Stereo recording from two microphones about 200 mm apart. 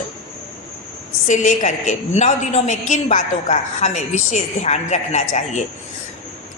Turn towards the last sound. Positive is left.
turn(degrees=35)  # may be behind; listen again after turning